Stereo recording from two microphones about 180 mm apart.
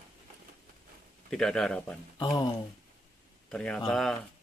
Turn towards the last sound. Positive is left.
turn(degrees=0)  # may be behind; listen again after turning